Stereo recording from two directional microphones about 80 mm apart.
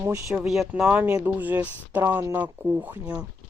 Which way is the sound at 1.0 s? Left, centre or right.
Centre.